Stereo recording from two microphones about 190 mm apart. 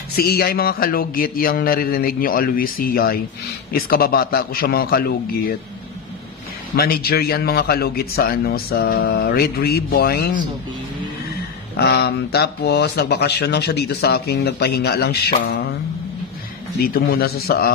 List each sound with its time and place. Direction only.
0.1 s a man's voice: 55° left (ahead or behind)
6.8 s speech: 55° left (ahead or behind)
11.7 s speech: 55° left (ahead or behind)
16.8 s speech: 55° left (ahead or behind)